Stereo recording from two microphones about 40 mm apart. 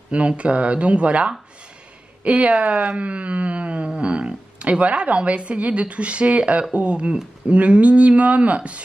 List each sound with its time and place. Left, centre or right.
0.4 s speech: right